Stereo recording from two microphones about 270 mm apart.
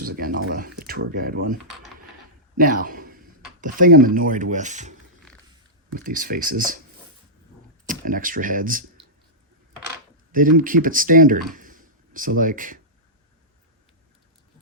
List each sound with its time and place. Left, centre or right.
0.0 s speech: right
2.6 s a man's voice: right
6.1 s speech: right
7.9 s speech: right
10.3 s speech: right